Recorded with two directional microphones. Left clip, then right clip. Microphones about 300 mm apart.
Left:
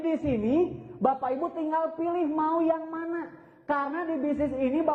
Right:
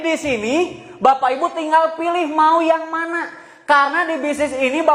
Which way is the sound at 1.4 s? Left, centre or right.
Right.